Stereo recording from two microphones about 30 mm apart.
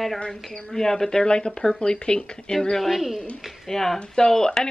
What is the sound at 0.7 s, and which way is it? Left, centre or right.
Speech, centre.